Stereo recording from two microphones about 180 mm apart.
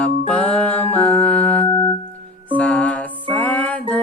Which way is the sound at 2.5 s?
5° left (ahead or behind).